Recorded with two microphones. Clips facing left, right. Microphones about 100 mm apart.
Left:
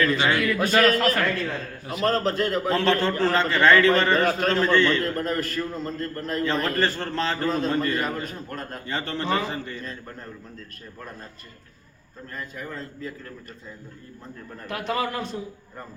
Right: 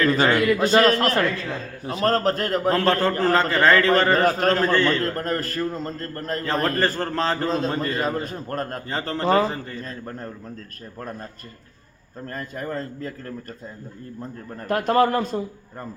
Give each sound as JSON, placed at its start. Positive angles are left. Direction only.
{"t": 0.3, "sound": "a man's voice", "side_deg": -25}
{"t": 2.1, "sound": "a man's voice", "side_deg": -45}
{"t": 7.5, "sound": "a man's voice", "side_deg": -25}
{"t": 8.4, "sound": "a man's voice", "side_deg": -50}
{"t": 8.9, "sound": "a man's voice", "side_deg": -35}
{"t": 12.3, "sound": "a man's voice", "side_deg": -50}
{"t": 14.7, "sound": "a man's voice", "side_deg": -50}